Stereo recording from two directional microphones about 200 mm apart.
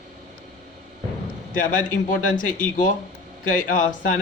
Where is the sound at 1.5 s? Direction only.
40° left (ahead or behind).